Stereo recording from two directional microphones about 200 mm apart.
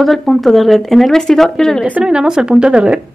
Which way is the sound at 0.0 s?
Centre (ahead or behind).